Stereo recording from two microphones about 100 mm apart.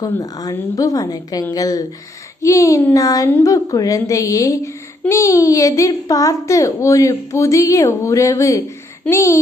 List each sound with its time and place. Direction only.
0.0 s speech: 40° left (ahead or behind)